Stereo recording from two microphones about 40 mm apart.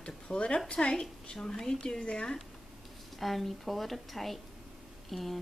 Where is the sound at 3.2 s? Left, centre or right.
Centre.